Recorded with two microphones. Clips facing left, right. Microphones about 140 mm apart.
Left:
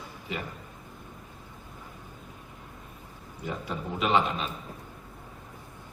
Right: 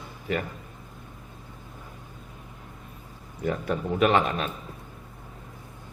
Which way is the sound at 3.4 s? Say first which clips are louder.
Right 7 dB; 55° right (ahead or behind).